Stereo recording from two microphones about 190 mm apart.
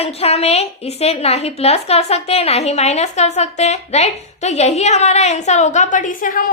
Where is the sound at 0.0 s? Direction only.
30° left (ahead or behind).